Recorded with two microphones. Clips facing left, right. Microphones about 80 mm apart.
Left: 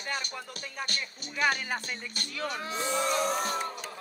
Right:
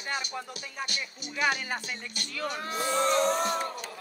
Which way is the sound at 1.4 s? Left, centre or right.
Centre.